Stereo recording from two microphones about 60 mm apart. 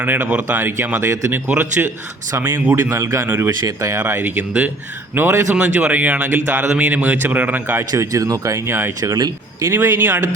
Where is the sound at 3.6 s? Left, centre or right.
Right.